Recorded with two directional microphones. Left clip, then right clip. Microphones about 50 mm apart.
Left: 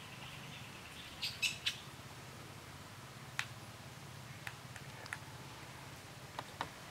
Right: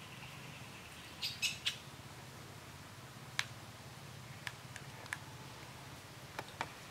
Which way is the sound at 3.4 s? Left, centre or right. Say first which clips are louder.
Right 2 dB; right.